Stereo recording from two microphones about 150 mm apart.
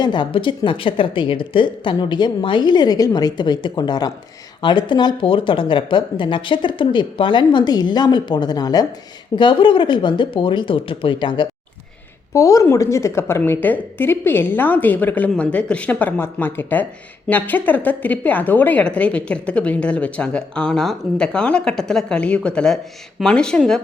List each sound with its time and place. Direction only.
0.0 s a woman's voice: 30° left (ahead or behind); by 23.8 s 5° left (ahead or behind)